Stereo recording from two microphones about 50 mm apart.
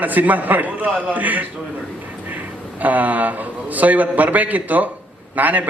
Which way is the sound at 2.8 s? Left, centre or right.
Right.